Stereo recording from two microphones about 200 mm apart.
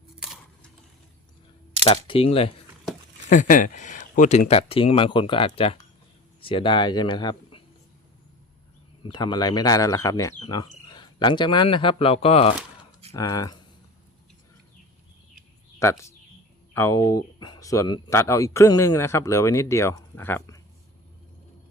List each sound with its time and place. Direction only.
1.8 s speech: 25° left (ahead or behind)
3.2 s speech: 40° left (ahead or behind); by 7.6 s 20° left (ahead or behind)
9.0 s speech: 20° left (ahead or behind)
13.1 s speech: 15° left (ahead or behind)
15.8 s speech: 15° left (ahead or behind)